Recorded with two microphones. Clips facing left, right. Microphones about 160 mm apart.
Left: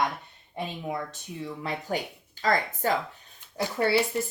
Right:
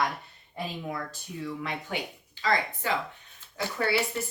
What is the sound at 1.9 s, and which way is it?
Speech, 40° left (ahead or behind).